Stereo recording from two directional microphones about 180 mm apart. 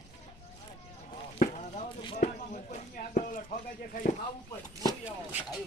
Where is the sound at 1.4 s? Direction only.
40° left (ahead or behind).